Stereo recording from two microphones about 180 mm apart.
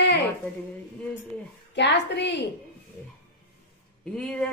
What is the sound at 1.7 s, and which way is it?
Speech, 75° left (ahead or behind).